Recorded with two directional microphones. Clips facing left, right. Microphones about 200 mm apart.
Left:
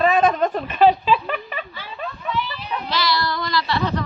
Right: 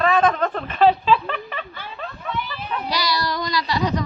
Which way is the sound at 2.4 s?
50° right (ahead or behind).